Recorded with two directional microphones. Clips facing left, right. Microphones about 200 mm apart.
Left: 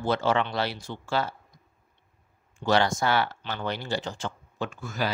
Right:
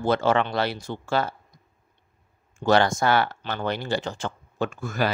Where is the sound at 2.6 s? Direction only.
50° right (ahead or behind).